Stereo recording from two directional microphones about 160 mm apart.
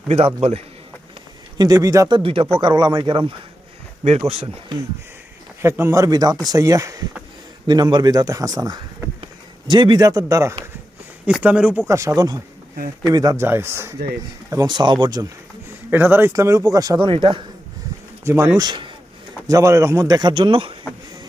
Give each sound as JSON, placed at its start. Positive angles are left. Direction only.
{"t": 0.1, "sound": "speech", "side_deg": -40}
{"t": 1.5, "sound": "speech", "side_deg": -25}
{"t": 5.6, "sound": "speech", "side_deg": -15}
{"t": 11.3, "sound": "speech", "side_deg": -5}
{"t": 11.9, "sound": "speech", "side_deg": -20}
{"t": 15.9, "sound": "speech", "side_deg": -15}
{"t": 18.3, "sound": "speech", "side_deg": -20}